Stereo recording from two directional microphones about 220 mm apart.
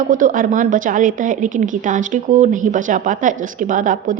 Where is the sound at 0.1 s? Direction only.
40° right (ahead or behind).